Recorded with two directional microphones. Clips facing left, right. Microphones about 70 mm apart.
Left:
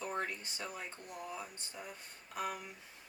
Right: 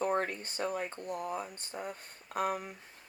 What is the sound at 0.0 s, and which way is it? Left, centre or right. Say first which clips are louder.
Speech: right 7 dB; right.